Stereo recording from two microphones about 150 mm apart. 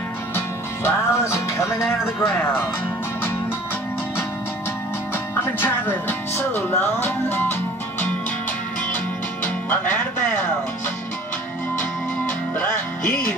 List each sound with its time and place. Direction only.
0.8 s music: 20° left (ahead or behind)
5.4 s music: 15° left (ahead or behind)
9.7 s music: 15° left (ahead or behind)
12.5 s music: 10° left (ahead or behind)